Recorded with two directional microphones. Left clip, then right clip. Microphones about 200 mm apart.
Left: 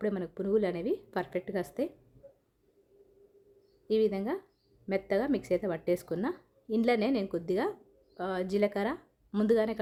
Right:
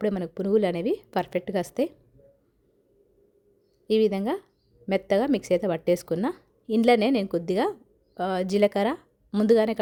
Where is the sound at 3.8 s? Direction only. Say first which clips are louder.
Right 6 dB; 40° right (ahead or behind).